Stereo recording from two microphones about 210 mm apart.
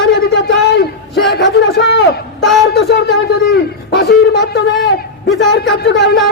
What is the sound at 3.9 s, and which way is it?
A man's voice, 50° left (ahead or behind).